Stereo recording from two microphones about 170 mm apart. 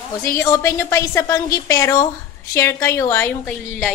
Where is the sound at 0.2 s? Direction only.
15° left (ahead or behind).